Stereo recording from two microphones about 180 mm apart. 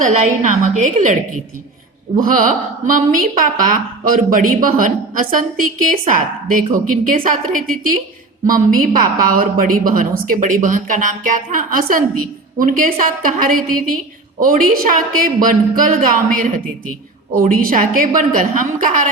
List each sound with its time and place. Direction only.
0.0 s a woman's voice: 45° right (ahead or behind)
2.1 s a woman's voice: 50° right (ahead or behind)